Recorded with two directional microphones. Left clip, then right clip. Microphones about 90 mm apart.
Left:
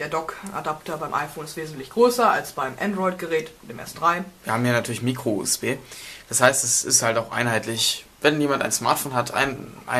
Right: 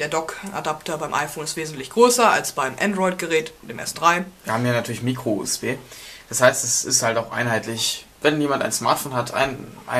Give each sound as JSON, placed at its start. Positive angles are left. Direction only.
{"t": 0.0, "sound": "speech", "side_deg": -35}
{"t": 4.5, "sound": "speech", "side_deg": 40}